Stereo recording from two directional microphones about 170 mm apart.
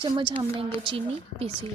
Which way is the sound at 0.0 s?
25° right (ahead or behind).